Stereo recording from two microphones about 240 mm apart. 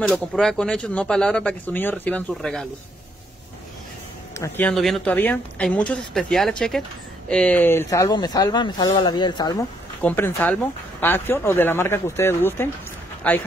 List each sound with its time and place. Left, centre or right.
0.0 s speech: centre
4.4 s speech: centre